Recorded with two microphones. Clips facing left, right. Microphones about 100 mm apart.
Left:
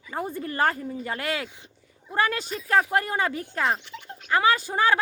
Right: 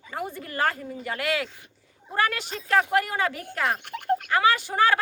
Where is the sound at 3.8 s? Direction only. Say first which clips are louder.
Right 15 dB; 55° right (ahead or behind).